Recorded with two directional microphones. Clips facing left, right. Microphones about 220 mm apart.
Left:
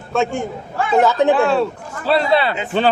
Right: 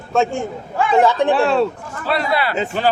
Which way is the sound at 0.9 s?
5° left (ahead or behind).